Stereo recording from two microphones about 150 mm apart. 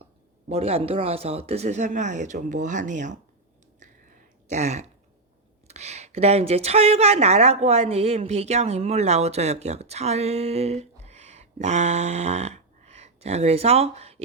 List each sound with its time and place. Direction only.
0.4 s speech: 45° right (ahead or behind)
3.8 s a sound: 55° right (ahead or behind)
5.6 s speech: 45° right (ahead or behind)